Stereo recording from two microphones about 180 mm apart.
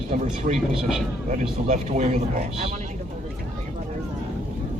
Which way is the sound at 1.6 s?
40° right (ahead or behind).